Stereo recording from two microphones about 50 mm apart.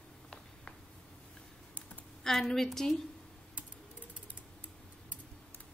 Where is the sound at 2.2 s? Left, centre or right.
Centre.